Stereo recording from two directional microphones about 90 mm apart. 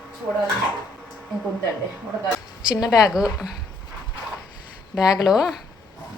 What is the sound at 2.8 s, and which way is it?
Speech, 40° left (ahead or behind).